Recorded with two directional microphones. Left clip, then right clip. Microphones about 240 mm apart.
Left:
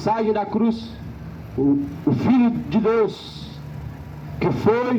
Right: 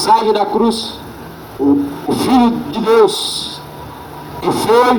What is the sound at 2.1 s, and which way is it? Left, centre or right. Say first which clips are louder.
A man's voice: right 9 dB; right.